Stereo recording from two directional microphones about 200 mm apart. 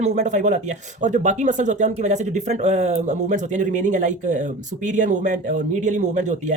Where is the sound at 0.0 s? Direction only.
35° right (ahead or behind).